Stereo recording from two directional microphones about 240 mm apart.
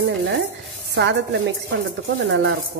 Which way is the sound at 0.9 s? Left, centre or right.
Right.